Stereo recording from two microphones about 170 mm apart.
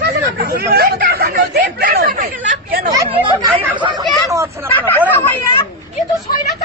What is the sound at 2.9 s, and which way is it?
Speech, 20° right (ahead or behind).